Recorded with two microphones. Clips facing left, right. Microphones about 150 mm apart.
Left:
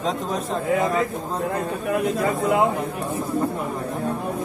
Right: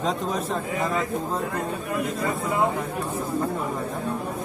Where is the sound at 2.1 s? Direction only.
90° left.